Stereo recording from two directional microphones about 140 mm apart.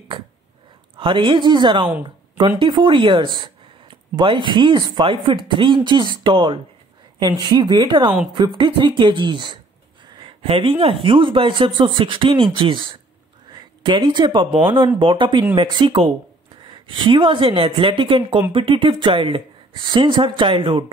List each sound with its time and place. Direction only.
0.9 s speech: 40° right (ahead or behind)